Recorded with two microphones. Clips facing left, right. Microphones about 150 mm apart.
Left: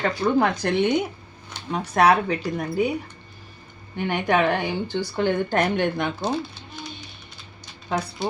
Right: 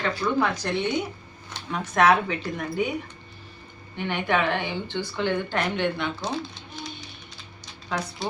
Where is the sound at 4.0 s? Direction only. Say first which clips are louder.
Left 3 dB; 45° left (ahead or behind).